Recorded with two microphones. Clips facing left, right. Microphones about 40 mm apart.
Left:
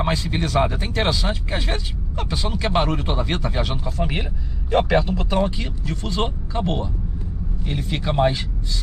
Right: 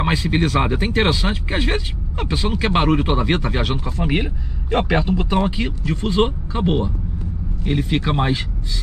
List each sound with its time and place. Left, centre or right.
0.0 s speech: centre